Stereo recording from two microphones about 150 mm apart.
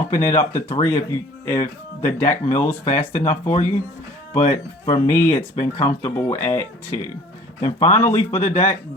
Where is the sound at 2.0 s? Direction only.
15° left (ahead or behind).